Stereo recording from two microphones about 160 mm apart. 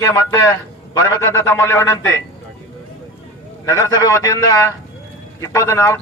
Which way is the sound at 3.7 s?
20° left (ahead or behind).